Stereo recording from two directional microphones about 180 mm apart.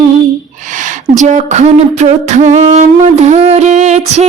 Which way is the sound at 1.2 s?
40° right (ahead or behind).